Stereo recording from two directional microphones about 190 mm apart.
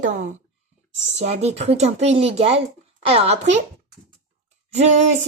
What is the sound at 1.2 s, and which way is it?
Speech, 35° right (ahead or behind).